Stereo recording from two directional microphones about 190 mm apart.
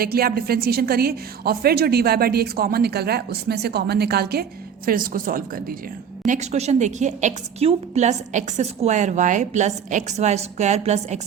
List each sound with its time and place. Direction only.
0.0 s a woman's voice: 50° right (ahead or behind)
6.2 s a woman's voice: 40° right (ahead or behind)